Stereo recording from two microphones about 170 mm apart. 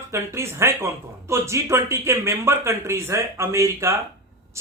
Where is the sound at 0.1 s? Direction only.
15° right (ahead or behind).